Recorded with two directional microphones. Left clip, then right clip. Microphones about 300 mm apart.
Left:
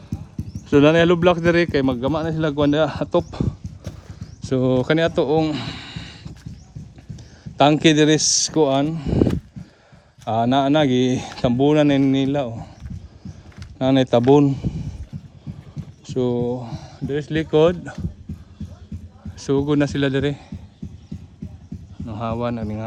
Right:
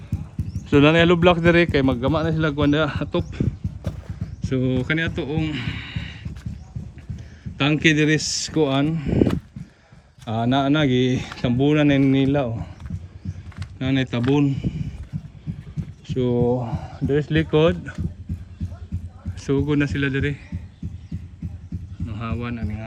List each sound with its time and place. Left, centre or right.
0.1 s clip-clop: centre
0.6 s speech: centre
4.4 s a sound: centre
7.6 s speech: centre
10.2 s speech: centre
13.7 s speech: centre
16.0 s speech: centre
19.4 s speech: centre
22.0 s speech: centre